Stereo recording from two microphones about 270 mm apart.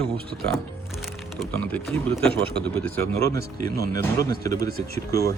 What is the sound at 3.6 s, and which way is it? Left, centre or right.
Speech, right.